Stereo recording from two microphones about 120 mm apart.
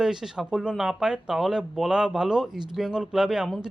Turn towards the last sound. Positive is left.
turn(degrees=-5)  # may be behind; listen again after turning